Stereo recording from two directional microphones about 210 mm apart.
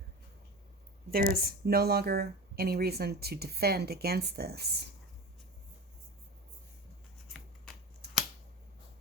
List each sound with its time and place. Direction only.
1.1 s speech: 45° right (ahead or behind)
8.0 s scissors: 50° right (ahead or behind)